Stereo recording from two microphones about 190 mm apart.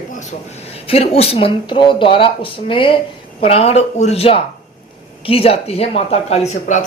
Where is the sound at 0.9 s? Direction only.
30° left (ahead or behind).